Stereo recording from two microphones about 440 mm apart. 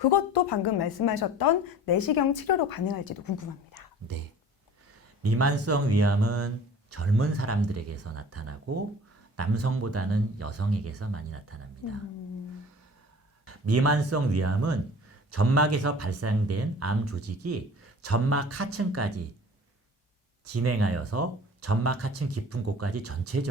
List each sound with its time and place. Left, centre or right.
0.0 s a woman's voice: left
5.2 s speech: right
13.4 s speech: right
20.6 s speech: right